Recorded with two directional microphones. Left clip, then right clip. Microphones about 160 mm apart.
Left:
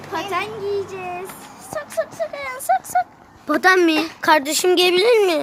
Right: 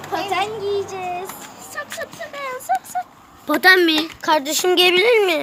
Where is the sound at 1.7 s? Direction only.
40° left (ahead or behind).